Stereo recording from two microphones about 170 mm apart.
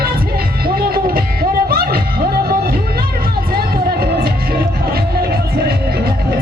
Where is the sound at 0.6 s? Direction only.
60° right (ahead or behind).